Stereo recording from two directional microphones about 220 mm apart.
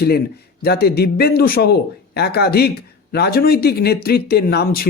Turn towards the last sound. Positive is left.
turn(degrees=45)  # may be behind; listen again after turning